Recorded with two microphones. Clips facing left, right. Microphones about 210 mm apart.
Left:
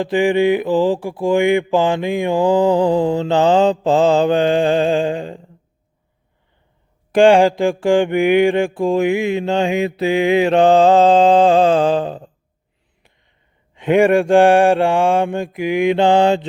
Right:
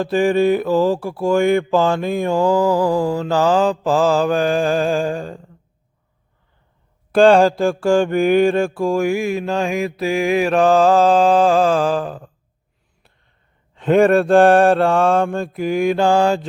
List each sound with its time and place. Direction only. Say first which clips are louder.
0.0 s mantra: left 1 dB; 15° left (ahead or behind)
7.1 s mantra: left 1 dB; 15° left (ahead or behind)
13.7 s mantra: even; 10° left (ahead or behind)